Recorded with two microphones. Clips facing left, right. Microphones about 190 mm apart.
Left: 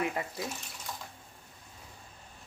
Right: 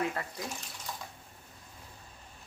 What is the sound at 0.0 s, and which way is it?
Speech, 15° left (ahead or behind).